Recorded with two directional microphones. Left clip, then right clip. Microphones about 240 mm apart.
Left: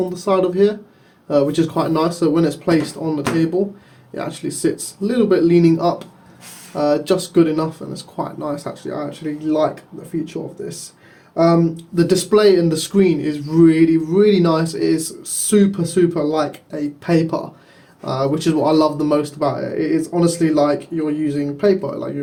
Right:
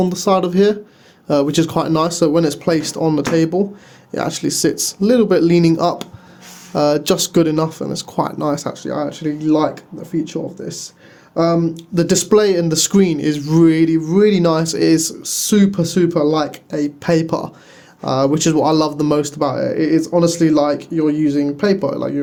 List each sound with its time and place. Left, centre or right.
0.1 s speech: right
11.3 s speech: right